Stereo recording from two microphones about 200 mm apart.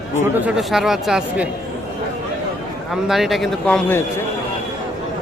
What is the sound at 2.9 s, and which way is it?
Speech, centre (ahead or behind).